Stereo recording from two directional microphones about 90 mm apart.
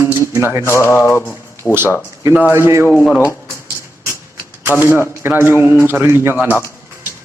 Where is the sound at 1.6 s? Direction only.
15° left (ahead or behind).